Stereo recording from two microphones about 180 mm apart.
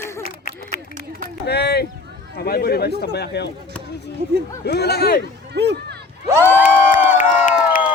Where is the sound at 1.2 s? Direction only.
65° left (ahead or behind).